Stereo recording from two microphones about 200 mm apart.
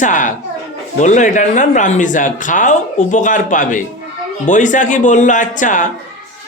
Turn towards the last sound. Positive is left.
turn(degrees=40)  # may be behind; listen again after turning